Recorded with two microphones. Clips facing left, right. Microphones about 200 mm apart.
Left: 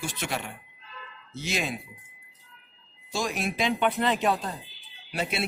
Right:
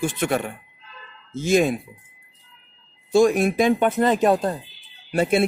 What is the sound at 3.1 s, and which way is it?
A man's voice, 55° right (ahead or behind).